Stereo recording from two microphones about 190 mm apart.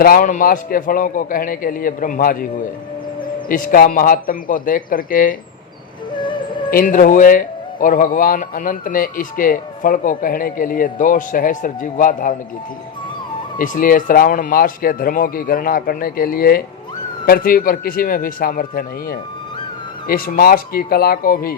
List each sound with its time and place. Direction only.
0.0 s speech: 50° left (ahead or behind)
6.1 s music: 25° left (ahead or behind)
6.7 s speech: 45° left (ahead or behind)
13.6 s speech: 45° left (ahead or behind)